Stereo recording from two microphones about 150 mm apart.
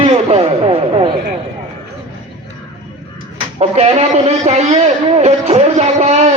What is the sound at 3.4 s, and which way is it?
A man's voice, 40° right (ahead or behind).